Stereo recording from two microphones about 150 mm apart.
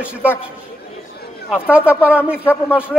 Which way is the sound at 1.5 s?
10° right (ahead or behind).